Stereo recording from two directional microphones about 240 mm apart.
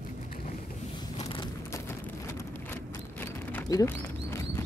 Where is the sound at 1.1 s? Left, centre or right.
Centre.